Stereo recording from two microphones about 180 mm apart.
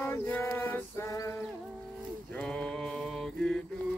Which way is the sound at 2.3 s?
5° left (ahead or behind).